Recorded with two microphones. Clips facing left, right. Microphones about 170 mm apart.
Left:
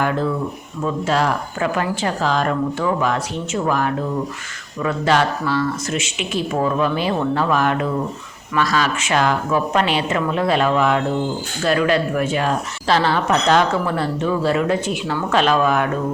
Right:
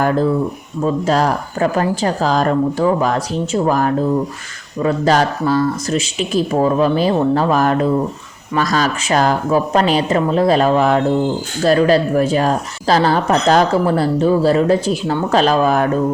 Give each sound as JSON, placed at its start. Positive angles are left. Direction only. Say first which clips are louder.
{"t": 0.0, "sound": "speech", "louder": "right 5 dB", "side_deg": -40}